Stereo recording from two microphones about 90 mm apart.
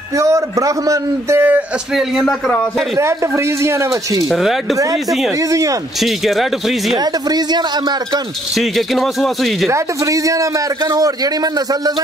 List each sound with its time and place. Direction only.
0.2 s a man's voice: 35° right (ahead or behind)
2.0 s a man's voice: centre (ahead or behind)
3.0 s a man's voice: 30° right (ahead or behind)
4.3 s a man's voice: centre (ahead or behind)
5.5 s a man's voice: 40° right (ahead or behind)
5.9 s a man's voice: centre (ahead or behind)
7.2 s speech: 50° right (ahead or behind)
8.5 s a man's voice: centre (ahead or behind)
9.7 s a man's voice: 40° right (ahead or behind)